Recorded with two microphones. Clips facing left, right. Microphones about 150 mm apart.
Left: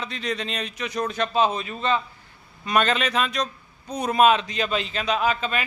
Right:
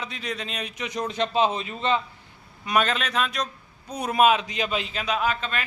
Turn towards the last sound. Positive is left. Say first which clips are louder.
# left 2 dB
turn(degrees=5)  # may be behind; listen again after turning